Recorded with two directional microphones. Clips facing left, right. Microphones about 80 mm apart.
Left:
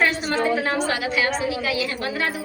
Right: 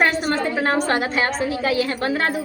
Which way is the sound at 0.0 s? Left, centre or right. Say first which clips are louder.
Right 2 dB; right.